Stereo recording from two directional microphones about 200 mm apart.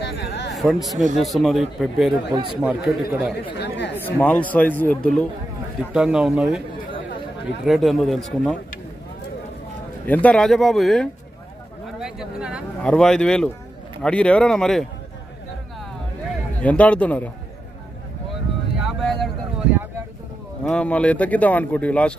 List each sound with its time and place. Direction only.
0.0 s a sound: 60° left (ahead or behind)
0.6 s speech: centre (ahead or behind)
3.5 s speech: 55° left (ahead or behind)
4.0 s speech: 5° left (ahead or behind)
7.6 s speech: centre (ahead or behind)
10.0 s speech: 10° left (ahead or behind)
12.0 s a sound: 5° right (ahead or behind)
12.8 s speech: 5° left (ahead or behind)
16.6 s speech: 5° left (ahead or behind)
18.9 s vehicle: centre (ahead or behind)
20.6 s speech: 5° left (ahead or behind)